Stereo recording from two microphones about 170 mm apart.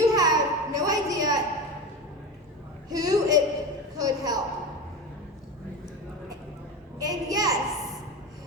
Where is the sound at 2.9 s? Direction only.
20° right (ahead or behind).